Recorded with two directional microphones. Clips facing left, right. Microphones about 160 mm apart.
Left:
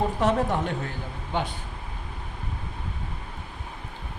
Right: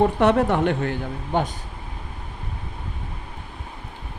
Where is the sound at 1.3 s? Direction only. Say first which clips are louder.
Right 5 dB; 45° right (ahead or behind).